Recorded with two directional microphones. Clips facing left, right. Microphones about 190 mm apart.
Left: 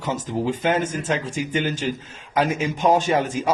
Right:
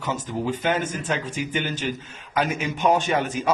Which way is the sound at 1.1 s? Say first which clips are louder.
Left 2 dB; 30° left (ahead or behind).